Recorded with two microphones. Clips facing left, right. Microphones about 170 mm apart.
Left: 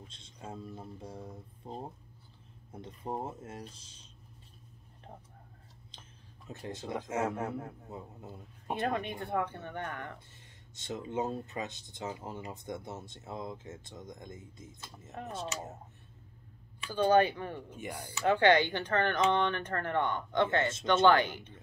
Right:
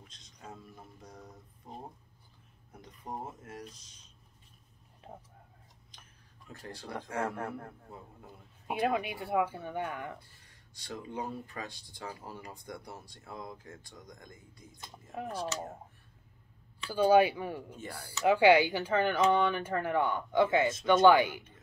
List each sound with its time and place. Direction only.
0.1 s speech: 25° left (ahead or behind)
5.9 s a sound: 25° left (ahead or behind)
6.6 s speech: 20° left (ahead or behind)
8.6 s speech: 5° right (ahead or behind)
10.1 s speech: 25° left (ahead or behind)
15.1 s speech: 5° right (ahead or behind)
16.9 s speech: 10° right (ahead or behind)
17.6 s speech: 15° left (ahead or behind)
18.2 s speech: 10° right (ahead or behind)